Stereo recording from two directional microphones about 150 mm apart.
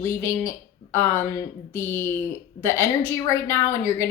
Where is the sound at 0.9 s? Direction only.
15° left (ahead or behind).